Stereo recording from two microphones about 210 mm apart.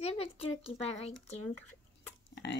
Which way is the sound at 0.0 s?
25° left (ahead or behind).